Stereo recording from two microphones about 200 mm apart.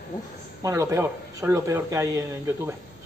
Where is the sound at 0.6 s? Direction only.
15° right (ahead or behind).